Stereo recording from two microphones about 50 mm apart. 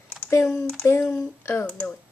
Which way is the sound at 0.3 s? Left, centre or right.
Left.